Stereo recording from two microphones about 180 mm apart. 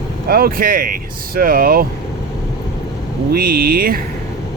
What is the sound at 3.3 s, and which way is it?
Speech, 55° right (ahead or behind).